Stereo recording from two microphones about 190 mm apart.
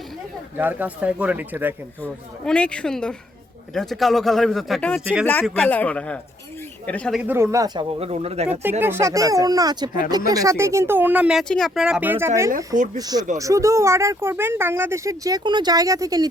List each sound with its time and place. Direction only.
0.5 s speech: 10° right (ahead or behind)
2.0 s speech: 5° left (ahead or behind)
7.2 s speech: 10° right (ahead or behind); by 8.4 s 35° right (ahead or behind)
8.8 s speech: 15° right (ahead or behind)
12.5 s speech: 45° right (ahead or behind)
13.0 s speech: 20° right (ahead or behind)